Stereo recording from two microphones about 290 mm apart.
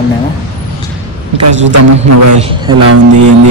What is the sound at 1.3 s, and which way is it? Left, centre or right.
A man's voice, right.